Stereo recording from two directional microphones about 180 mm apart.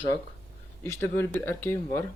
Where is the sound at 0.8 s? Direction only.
15° left (ahead or behind).